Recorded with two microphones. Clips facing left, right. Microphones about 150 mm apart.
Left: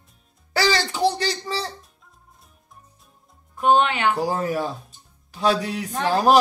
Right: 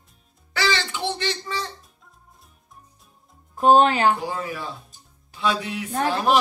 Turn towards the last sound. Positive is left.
turn(degrees=40)  # may be behind; listen again after turning